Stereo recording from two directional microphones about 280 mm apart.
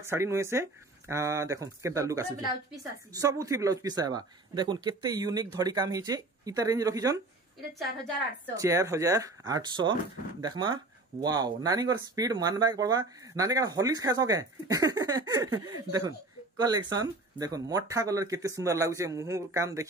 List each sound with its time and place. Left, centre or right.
0.0 s speech: centre
8.5 s speech: centre